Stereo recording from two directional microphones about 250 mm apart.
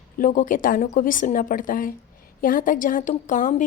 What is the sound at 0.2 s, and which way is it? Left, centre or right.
A woman's voice, left.